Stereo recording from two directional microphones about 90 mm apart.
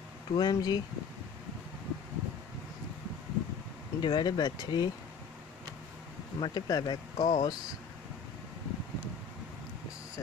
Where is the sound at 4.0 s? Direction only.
55° left (ahead or behind).